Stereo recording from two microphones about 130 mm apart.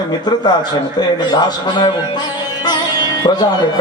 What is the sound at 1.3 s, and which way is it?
Speech, 35° left (ahead or behind).